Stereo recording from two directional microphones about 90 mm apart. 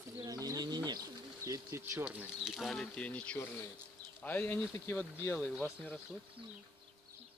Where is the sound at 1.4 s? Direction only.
35° right (ahead or behind).